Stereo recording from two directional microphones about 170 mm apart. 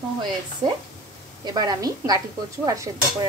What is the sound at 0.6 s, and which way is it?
Speech, 30° right (ahead or behind).